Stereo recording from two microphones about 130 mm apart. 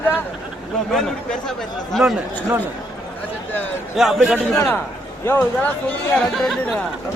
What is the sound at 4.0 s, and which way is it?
Speech, 5° right (ahead or behind).